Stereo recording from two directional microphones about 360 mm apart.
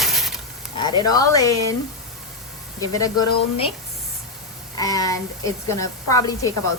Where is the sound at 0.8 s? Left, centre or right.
Centre.